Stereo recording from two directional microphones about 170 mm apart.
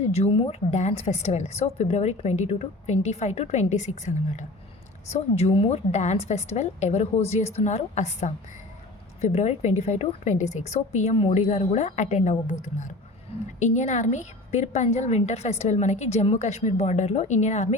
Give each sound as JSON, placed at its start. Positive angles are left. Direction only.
{"t": 0.1, "sound": "a woman's voice", "side_deg": 35}
{"t": 13.6, "sound": "a woman's voice", "side_deg": 45}